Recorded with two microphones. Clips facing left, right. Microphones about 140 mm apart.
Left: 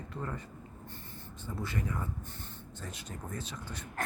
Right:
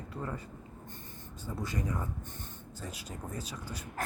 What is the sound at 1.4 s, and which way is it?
Speech, 15° right (ahead or behind).